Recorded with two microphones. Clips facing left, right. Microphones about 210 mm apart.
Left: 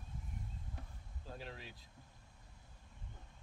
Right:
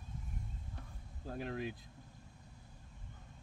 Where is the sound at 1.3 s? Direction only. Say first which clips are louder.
Right 10 dB; 55° right (ahead or behind).